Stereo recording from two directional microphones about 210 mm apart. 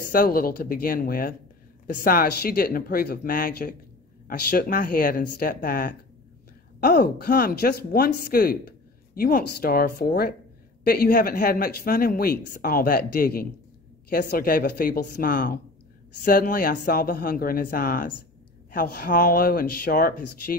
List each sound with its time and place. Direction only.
0.1 s speech: 45° left (ahead or behind)